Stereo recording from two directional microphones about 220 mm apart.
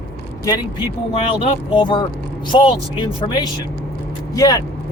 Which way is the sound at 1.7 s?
20° left (ahead or behind).